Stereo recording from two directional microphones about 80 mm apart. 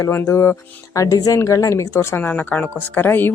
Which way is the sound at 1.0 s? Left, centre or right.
Left.